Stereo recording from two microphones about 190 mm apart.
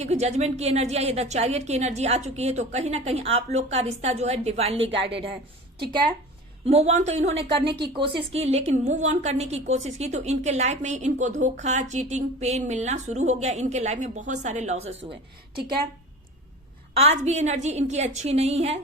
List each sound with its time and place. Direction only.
0.0 s a woman's voice: 35° right (ahead or behind)
4.9 s a woman's voice: 70° right (ahead or behind)
6.7 s a woman's voice: 35° right (ahead or behind)
16.9 s a woman's voice: 35° right (ahead or behind)